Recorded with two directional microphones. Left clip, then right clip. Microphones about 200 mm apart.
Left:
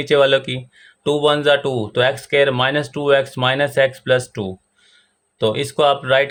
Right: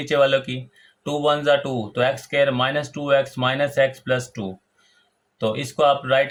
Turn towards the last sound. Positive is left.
turn(degrees=50)  # may be behind; listen again after turning